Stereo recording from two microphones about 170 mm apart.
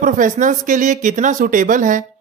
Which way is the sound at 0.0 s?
50° right (ahead or behind).